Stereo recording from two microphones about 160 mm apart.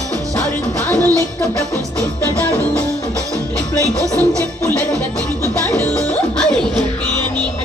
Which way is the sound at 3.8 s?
20° right (ahead or behind).